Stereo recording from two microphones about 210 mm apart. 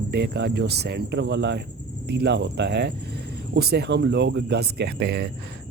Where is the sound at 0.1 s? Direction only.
55° right (ahead or behind).